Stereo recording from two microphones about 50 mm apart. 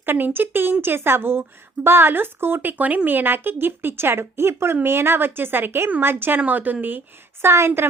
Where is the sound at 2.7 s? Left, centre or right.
Right.